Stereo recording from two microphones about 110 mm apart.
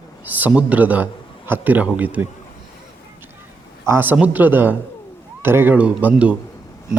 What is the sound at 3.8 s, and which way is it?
A man's voice, 20° right (ahead or behind).